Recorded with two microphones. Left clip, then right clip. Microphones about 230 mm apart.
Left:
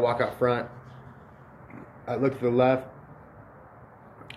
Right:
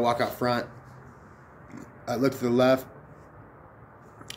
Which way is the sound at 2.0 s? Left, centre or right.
Centre.